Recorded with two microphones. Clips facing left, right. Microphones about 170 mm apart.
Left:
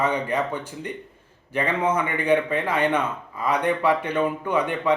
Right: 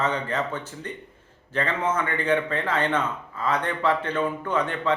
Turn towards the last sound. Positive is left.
turn(degrees=10)  # may be behind; listen again after turning